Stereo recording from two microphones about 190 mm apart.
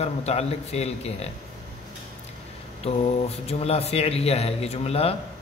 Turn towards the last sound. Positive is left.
turn(degrees=30)  # may be behind; listen again after turning